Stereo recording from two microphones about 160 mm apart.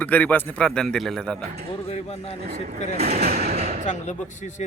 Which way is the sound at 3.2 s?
75° right (ahead or behind).